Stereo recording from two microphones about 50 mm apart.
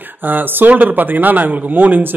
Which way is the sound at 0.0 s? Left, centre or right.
Right.